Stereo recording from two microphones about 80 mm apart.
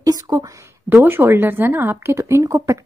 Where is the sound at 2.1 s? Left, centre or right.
Right.